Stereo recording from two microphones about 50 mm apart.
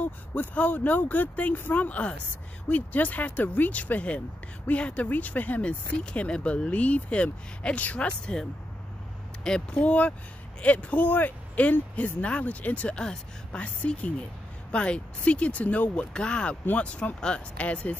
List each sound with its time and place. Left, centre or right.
0.0 s speech: left
9.4 s speech: centre
9.8 s speech: left
16.1 s speech: left